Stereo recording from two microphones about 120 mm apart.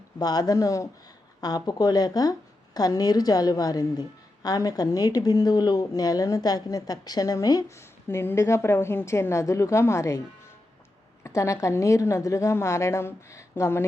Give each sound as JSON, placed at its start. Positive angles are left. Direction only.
{"t": 0.2, "sound": "a woman's voice", "side_deg": 35}
{"t": 11.2, "sound": "a woman's voice", "side_deg": 25}